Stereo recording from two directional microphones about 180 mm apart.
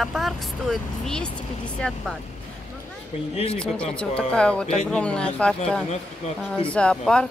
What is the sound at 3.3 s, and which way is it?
Speech, 35° left (ahead or behind).